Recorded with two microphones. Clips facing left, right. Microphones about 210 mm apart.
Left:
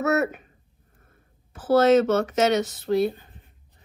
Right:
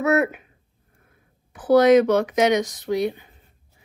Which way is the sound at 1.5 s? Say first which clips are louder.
Right 3 dB; 15° right (ahead or behind).